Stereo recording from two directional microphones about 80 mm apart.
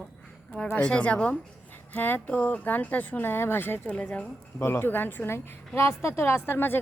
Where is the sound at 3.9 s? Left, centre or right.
Centre.